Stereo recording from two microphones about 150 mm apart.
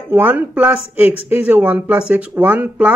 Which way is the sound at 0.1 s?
10° right (ahead or behind).